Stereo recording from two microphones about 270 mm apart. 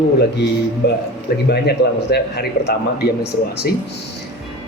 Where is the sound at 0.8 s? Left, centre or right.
Left.